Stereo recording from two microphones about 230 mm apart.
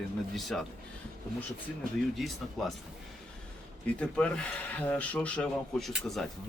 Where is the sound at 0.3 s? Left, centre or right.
Centre.